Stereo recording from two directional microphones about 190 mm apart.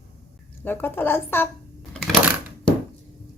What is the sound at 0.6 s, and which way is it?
Speech, 10° left (ahead or behind).